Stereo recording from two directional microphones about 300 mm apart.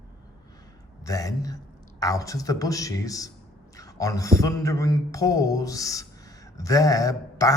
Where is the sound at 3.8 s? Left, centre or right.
Centre.